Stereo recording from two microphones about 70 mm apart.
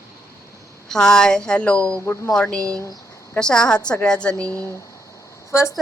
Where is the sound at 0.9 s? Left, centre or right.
Centre.